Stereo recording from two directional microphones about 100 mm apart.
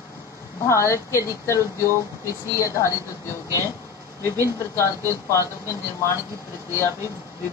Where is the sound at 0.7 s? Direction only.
30° left (ahead or behind).